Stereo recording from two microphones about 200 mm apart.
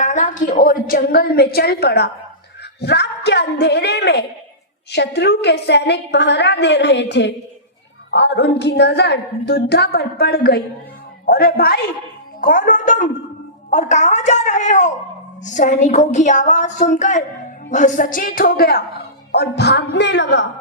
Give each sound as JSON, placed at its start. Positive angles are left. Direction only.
{"t": 0.0, "sound": "a woman's voice", "side_deg": 40}